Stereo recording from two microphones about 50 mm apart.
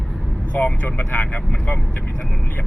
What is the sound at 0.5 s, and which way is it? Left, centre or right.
Speech, left.